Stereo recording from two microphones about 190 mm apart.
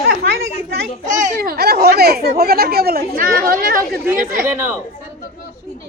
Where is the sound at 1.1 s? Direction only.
45° right (ahead or behind).